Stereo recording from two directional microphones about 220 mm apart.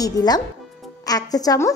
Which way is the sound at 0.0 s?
20° left (ahead or behind).